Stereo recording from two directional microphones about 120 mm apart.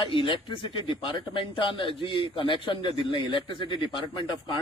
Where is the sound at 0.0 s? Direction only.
45° left (ahead or behind).